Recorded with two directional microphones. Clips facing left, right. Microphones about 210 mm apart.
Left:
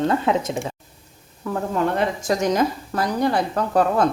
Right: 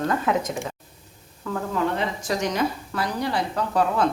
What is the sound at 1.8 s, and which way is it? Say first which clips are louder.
A woman's voice: left 5 dB; 45° left (ahead or behind).